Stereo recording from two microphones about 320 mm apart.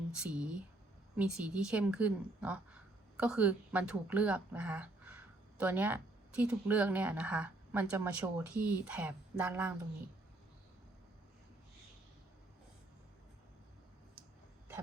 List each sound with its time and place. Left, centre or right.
0.2 s speech: centre